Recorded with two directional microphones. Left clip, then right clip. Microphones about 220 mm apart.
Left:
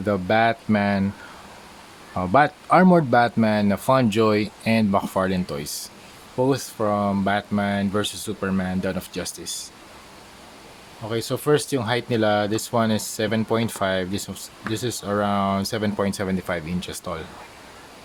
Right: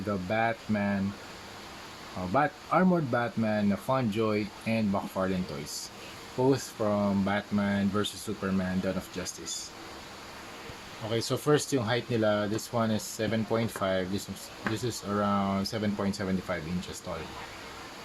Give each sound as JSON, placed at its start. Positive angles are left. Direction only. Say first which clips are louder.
{"t": 0.1, "sound": "speech", "louder": "left 10 dB", "side_deg": 35}
{"t": 2.3, "sound": "speech", "louder": "left 10 dB", "side_deg": 35}
{"t": 11.1, "sound": "speech", "louder": "left 6 dB", "side_deg": 25}